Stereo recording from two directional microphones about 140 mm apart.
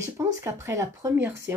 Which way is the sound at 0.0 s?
20° right (ahead or behind).